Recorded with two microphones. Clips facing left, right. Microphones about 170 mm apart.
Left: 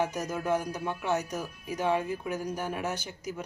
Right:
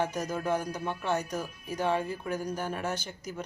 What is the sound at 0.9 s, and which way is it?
Speech, 15° left (ahead or behind).